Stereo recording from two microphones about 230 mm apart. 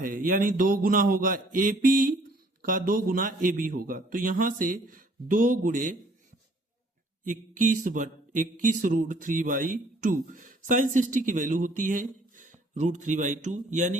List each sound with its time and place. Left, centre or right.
0.0 s speech: right
7.3 s speech: right